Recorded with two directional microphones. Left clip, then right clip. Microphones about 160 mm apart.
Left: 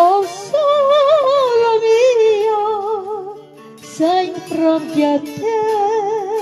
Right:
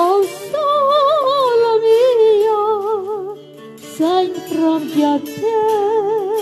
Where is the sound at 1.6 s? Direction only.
20° right (ahead or behind).